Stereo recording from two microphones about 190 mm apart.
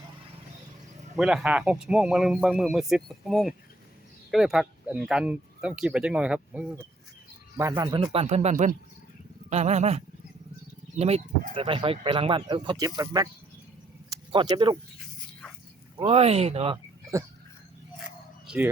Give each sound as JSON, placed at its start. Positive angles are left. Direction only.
{"t": 1.1, "sound": "speech", "side_deg": -5}
{"t": 7.5, "sound": "speech", "side_deg": -20}
{"t": 16.0, "sound": "speech", "side_deg": -30}
{"t": 16.7, "sound": "a sound", "side_deg": -15}
{"t": 18.4, "sound": "speech", "side_deg": -5}